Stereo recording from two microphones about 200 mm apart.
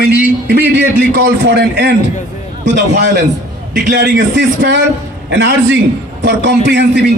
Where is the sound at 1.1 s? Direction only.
55° right (ahead or behind).